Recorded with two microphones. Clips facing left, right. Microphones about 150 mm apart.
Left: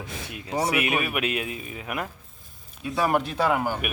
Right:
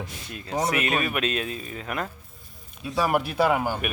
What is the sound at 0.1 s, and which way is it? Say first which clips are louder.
Speech: left 3 dB; 90° left.